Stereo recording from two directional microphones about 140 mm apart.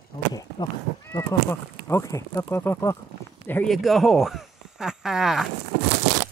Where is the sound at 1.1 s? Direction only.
20° left (ahead or behind).